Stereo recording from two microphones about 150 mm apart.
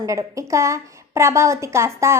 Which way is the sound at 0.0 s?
20° right (ahead or behind).